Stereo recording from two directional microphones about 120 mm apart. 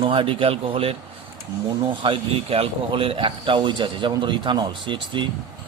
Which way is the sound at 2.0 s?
50° right (ahead or behind).